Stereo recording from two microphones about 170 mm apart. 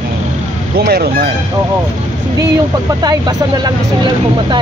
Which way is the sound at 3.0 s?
20° right (ahead or behind).